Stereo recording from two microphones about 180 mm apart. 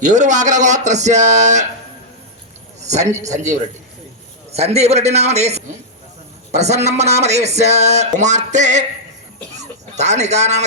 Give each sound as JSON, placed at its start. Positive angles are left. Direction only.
{"t": 0.0, "sound": "speech", "side_deg": -45}
{"t": 2.8, "sound": "a man's voice", "side_deg": -40}
{"t": 4.5, "sound": "speech", "side_deg": -35}